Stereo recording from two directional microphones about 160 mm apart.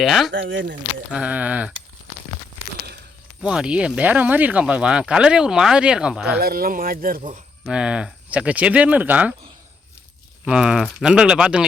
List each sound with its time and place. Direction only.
0.0 s speech: centre (ahead or behind)
3.4 s speech: 5° right (ahead or behind)
6.4 s speech: 65° right (ahead or behind)
7.2 s speech: 50° right (ahead or behind)
7.6 s speech: 5° right (ahead or behind)
10.4 s speech: 5° right (ahead or behind)